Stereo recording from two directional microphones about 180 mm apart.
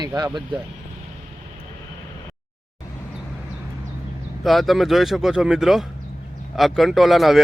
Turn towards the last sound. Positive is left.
turn(degrees=0)  # may be behind; listen again after turning